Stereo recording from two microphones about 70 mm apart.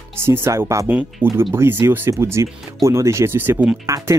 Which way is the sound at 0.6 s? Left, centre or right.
Right.